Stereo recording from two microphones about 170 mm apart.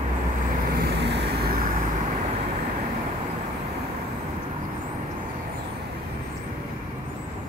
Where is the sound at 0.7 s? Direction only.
75° right (ahead or behind).